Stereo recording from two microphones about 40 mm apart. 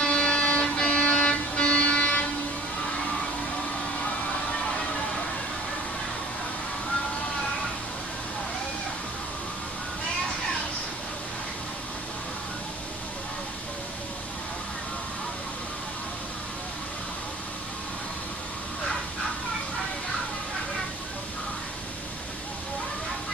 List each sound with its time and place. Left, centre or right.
0.0 s vehicle: left